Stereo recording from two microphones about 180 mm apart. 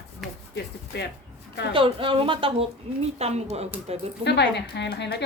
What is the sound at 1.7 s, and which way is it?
A woman's voice, 30° right (ahead or behind).